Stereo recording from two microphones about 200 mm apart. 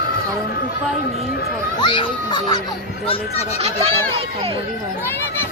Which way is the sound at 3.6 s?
30° right (ahead or behind).